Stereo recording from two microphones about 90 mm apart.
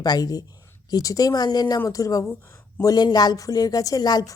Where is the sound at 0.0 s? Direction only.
45° left (ahead or behind).